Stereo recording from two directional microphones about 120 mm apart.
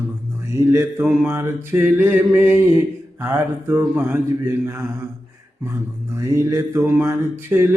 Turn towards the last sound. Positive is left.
turn(degrees=-20)  # may be behind; listen again after turning